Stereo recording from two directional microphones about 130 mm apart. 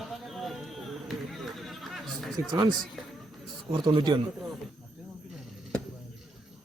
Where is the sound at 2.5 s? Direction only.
35° right (ahead or behind).